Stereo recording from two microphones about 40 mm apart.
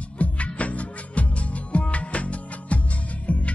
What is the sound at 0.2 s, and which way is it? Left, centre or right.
Music, left.